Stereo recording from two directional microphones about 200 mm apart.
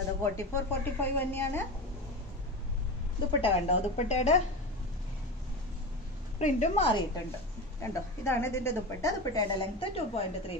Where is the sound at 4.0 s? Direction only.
35° left (ahead or behind).